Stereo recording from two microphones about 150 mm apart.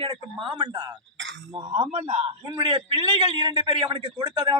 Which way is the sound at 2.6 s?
35° right (ahead or behind).